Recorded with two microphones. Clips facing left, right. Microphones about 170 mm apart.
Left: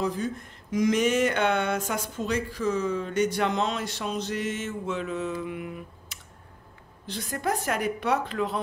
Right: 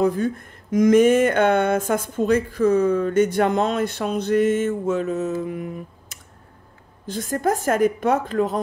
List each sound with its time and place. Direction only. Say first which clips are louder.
0.0 s speech: right 8 dB; 55° right (ahead or behind)